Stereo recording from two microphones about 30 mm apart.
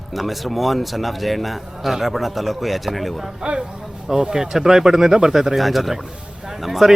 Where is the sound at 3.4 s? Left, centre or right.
Right.